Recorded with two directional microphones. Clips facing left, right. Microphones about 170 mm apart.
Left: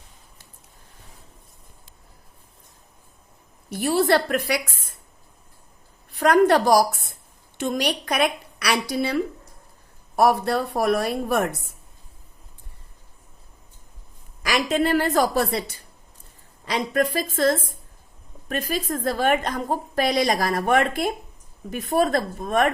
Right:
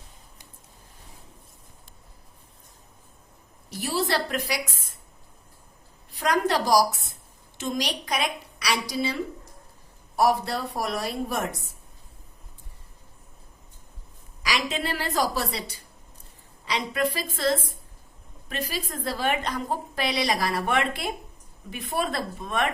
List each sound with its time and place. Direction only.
3.7 s a woman's voice: 55° left (ahead or behind)
6.1 s a woman's voice: 55° left (ahead or behind)
10.2 s a woman's voice: 55° left (ahead or behind)
14.4 s a woman's voice: 50° left (ahead or behind)
18.7 s a woman's voice: 50° left (ahead or behind)